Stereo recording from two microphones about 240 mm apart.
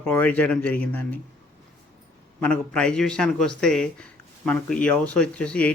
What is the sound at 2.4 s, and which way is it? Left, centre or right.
Speech, centre.